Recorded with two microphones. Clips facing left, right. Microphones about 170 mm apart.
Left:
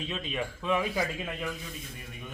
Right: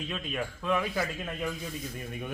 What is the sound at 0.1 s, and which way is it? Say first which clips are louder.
Speech: even; centre (ahead or behind).